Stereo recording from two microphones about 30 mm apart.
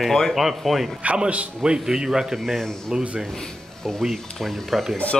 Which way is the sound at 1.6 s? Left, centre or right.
Right.